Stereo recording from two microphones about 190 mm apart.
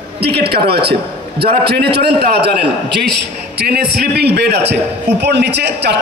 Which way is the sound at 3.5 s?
55° right (ahead or behind).